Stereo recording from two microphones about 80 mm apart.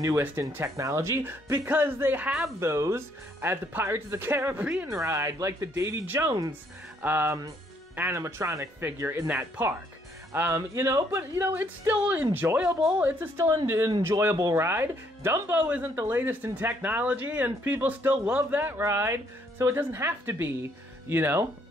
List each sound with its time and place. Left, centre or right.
0.7 s speech: right; by 2.4 s centre
2.6 s speech: right
4.6 s speech: centre
4.8 s speech: right
8.2 s speech: right
11.3 s speech: right
11.9 s speech: centre
14.0 s speech: right